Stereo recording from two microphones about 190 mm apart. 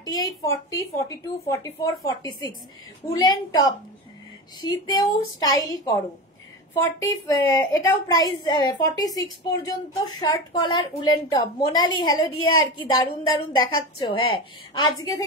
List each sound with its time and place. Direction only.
0.0 s a woman's voice: 20° left (ahead or behind)